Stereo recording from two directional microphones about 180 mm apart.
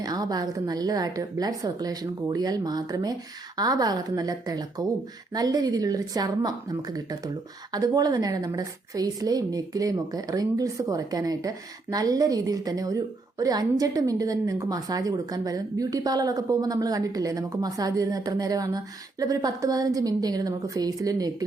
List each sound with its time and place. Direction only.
0.0 s a woman's voice: 20° right (ahead or behind)